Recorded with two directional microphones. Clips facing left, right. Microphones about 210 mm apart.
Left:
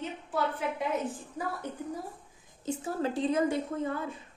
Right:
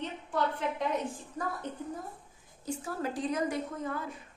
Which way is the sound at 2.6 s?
25° left (ahead or behind).